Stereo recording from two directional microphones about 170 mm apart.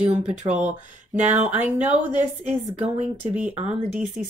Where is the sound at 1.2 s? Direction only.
45° right (ahead or behind).